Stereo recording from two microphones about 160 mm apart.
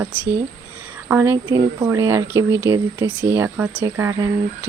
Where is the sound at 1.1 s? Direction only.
15° right (ahead or behind).